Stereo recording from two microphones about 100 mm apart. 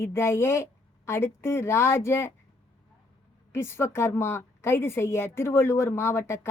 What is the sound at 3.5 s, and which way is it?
A woman's voice, 25° left (ahead or behind).